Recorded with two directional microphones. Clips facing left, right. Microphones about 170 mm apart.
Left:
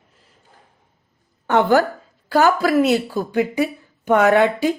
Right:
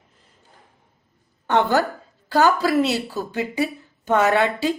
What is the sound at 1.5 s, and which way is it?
A woman's voice, 10° left (ahead or behind).